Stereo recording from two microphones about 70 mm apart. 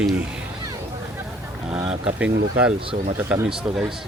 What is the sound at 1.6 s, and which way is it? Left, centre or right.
Speech, centre.